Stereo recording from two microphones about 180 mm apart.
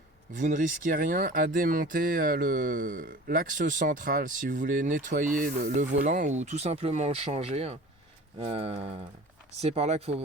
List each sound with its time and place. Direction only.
0.3 s speech: 45° right (ahead or behind)